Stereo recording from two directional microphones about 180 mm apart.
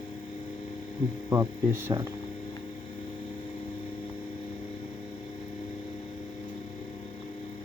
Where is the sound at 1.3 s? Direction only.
15° right (ahead or behind).